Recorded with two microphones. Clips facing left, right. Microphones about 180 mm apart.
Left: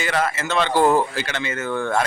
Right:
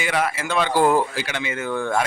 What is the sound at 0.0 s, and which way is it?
Speech, 10° right (ahead or behind).